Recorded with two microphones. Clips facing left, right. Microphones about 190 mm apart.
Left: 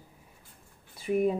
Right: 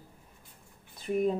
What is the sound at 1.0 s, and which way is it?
Speech, 10° left (ahead or behind).